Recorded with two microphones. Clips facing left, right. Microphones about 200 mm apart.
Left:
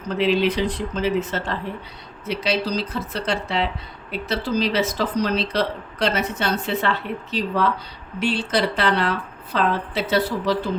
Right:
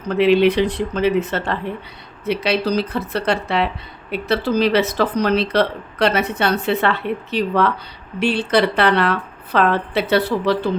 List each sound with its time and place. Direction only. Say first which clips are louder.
0.2 s speech: right 6 dB; 60° right (ahead or behind)